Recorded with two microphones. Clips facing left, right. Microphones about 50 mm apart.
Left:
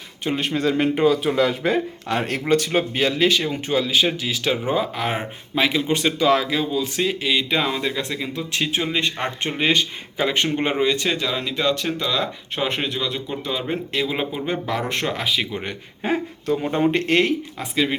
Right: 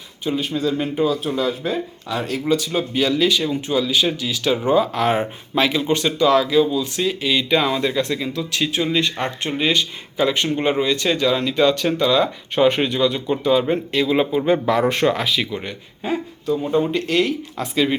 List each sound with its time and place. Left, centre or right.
0.3 s a man's voice: left
4.5 s speech: centre
6.0 s speech: left
7.3 s speech: centre
8.3 s a man's voice: left
11.1 s speech: centre
14.4 s speech: centre
15.6 s a man's voice: left
17.6 s speech: centre